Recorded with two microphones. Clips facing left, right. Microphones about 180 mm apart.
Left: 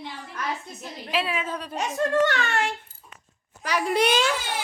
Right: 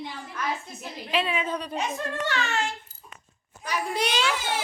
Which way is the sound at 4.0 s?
50° left (ahead or behind).